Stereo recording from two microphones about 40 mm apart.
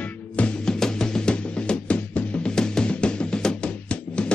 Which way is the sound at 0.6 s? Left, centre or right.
Centre.